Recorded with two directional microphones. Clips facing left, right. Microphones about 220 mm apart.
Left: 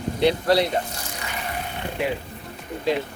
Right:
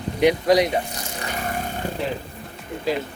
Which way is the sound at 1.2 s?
45° right (ahead or behind).